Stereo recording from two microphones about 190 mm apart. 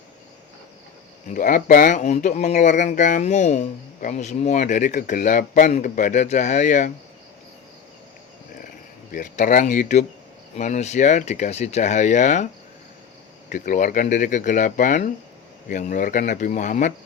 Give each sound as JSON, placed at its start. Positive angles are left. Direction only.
{"t": 1.3, "sound": "speech", "side_deg": 45}
{"t": 9.1, "sound": "speech", "side_deg": 40}
{"t": 13.5, "sound": "speech", "side_deg": 40}